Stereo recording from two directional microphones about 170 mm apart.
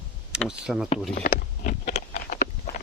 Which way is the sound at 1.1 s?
55° left (ahead or behind).